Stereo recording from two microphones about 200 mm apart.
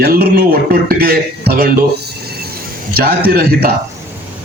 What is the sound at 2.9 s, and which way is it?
Speech, 50° right (ahead or behind).